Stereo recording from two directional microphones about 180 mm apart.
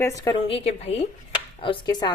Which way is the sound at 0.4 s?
30° left (ahead or behind).